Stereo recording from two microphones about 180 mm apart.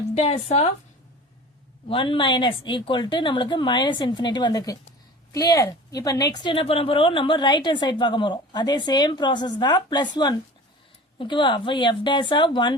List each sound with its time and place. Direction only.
0.1 s a woman's voice: 35° left (ahead or behind)
1.9 s a woman's voice: 30° left (ahead or behind)